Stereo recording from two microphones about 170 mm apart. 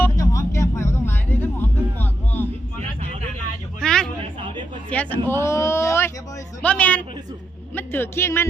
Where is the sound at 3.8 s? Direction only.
5° left (ahead or behind).